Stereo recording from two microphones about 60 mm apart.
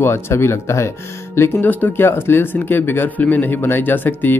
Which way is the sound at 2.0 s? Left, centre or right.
Left.